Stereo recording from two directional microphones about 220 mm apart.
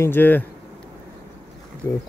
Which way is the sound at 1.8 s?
15° left (ahead or behind).